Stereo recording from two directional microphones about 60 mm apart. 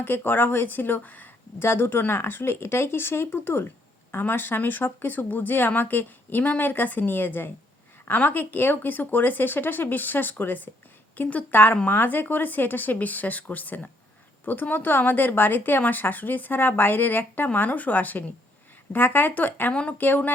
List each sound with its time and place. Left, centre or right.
0.0 s speech: left
1.6 s a woman's voice: left